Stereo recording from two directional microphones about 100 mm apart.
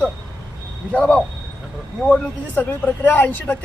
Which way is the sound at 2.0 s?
15° left (ahead or behind).